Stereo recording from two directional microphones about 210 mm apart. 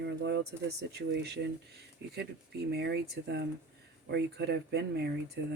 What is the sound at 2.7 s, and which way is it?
Speech, 55° right (ahead or behind).